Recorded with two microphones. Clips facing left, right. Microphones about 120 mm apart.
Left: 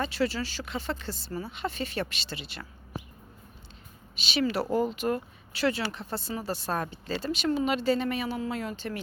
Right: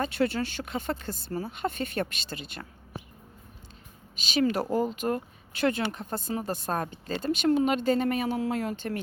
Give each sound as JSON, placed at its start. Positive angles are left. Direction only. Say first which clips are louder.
{"t": 0.0, "sound": "speech", "louder": "right 2 dB", "side_deg": -50}
{"t": 4.2, "sound": "speech", "louder": "right 2 dB", "side_deg": -40}